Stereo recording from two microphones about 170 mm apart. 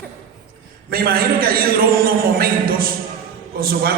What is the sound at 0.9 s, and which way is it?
A man's voice, 60° right (ahead or behind).